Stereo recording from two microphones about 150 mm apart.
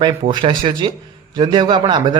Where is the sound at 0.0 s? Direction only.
30° right (ahead or behind).